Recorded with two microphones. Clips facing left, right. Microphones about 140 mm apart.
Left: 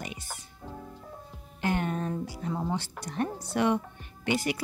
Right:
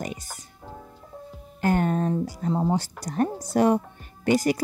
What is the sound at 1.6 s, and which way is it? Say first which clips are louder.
Speech: right 6 dB; 40° right (ahead or behind).